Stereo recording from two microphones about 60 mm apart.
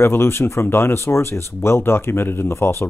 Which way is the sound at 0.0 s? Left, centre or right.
Left.